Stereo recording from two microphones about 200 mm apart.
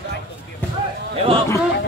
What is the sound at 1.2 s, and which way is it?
Speech, 25° right (ahead or behind).